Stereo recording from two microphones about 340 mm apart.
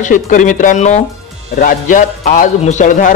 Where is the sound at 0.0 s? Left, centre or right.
Left.